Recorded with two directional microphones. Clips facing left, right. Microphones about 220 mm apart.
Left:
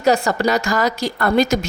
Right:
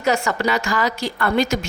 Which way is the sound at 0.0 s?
35° left (ahead or behind).